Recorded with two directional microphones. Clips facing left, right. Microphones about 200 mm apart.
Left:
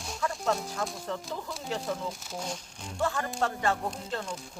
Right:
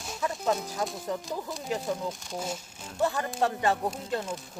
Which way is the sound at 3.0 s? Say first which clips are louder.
Right 3 dB; 20° right (ahead or behind).